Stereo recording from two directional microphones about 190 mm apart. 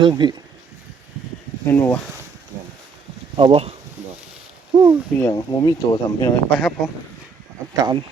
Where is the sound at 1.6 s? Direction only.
10° left (ahead or behind).